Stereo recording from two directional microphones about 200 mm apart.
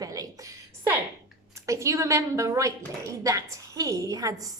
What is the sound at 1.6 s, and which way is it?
A woman's voice, 15° right (ahead or behind).